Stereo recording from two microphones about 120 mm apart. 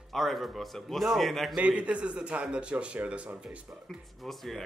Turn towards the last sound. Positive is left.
turn(degrees=0)  # may be behind; listen again after turning